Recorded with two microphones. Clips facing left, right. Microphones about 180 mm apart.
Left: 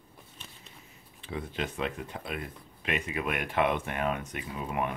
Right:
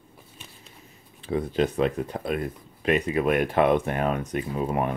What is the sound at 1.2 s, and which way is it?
Speech, 40° right (ahead or behind).